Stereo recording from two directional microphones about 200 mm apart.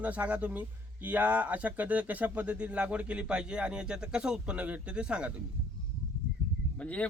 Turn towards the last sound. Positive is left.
turn(degrees=5)  # may be behind; listen again after turning